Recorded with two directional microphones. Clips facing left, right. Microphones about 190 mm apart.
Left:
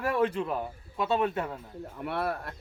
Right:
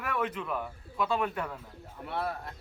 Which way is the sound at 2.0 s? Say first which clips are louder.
Left 3 dB; 65° left (ahead or behind).